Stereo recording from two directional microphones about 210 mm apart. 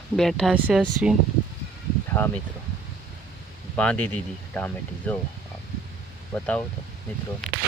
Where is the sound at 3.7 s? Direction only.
5° left (ahead or behind).